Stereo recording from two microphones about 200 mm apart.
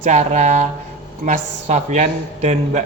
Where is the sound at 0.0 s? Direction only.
35° right (ahead or behind).